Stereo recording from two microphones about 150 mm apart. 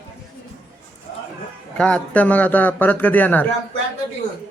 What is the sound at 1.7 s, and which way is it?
A man's voice, 5° left (ahead or behind).